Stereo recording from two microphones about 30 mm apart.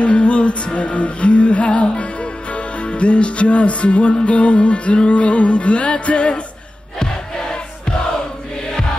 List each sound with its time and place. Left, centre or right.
0.0 s music: left